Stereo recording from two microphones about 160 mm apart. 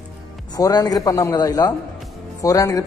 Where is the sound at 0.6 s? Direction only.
25° left (ahead or behind).